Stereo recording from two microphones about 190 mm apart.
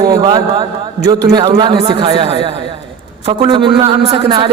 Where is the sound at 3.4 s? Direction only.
25° right (ahead or behind).